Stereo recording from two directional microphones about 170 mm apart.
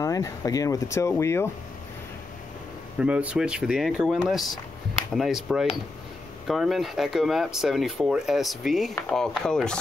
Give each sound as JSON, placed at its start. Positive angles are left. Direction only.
{"t": 0.0, "sound": "speech", "side_deg": 20}
{"t": 3.0, "sound": "speech", "side_deg": -5}